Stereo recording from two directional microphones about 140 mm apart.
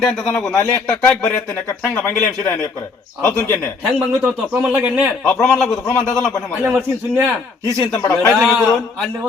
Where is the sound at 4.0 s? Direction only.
5° right (ahead or behind).